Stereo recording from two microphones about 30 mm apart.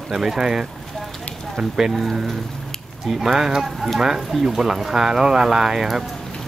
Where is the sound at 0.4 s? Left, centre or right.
Centre.